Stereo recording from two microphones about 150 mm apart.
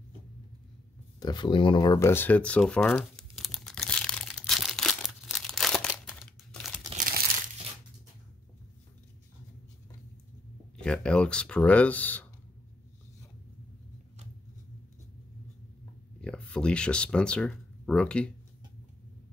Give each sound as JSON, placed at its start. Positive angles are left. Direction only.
{"t": 1.2, "sound": "a sound", "side_deg": 30}
{"t": 7.1, "sound": "crumpling", "side_deg": -75}
{"t": 10.8, "sound": "speech", "side_deg": 5}
{"t": 16.2, "sound": "speech", "side_deg": 5}